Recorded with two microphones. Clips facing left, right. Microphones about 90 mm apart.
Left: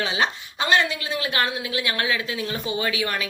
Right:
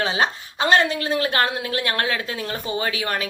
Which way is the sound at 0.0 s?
35° right (ahead or behind).